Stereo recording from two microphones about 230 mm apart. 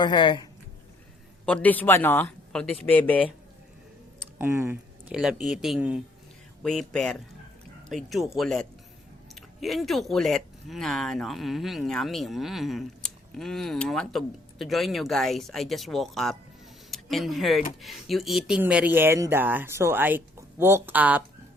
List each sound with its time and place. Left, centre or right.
0.0 s speech: centre
1.5 s speech: centre
4.4 s speech: centre